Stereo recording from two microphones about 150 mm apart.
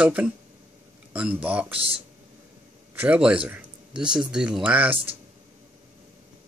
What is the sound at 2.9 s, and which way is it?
A man's voice, 10° right (ahead or behind).